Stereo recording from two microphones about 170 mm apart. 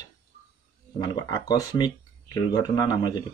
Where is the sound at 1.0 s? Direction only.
25° left (ahead or behind).